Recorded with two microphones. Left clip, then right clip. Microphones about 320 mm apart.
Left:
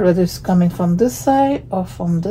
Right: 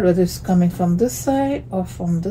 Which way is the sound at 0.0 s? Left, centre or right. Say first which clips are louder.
Left 2 dB; left.